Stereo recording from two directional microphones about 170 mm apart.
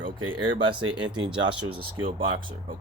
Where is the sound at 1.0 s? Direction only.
30° right (ahead or behind).